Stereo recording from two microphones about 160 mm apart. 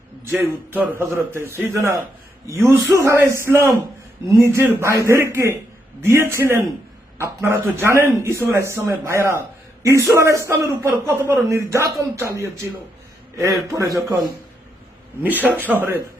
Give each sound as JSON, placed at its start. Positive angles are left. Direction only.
{"t": 0.3, "sound": "speech", "side_deg": -10}
{"t": 13.7, "sound": "speech", "side_deg": -20}
{"t": 15.2, "sound": "speech", "side_deg": -10}